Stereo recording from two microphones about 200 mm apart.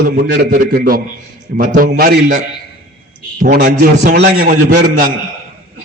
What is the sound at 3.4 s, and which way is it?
A man's voice, 50° right (ahead or behind).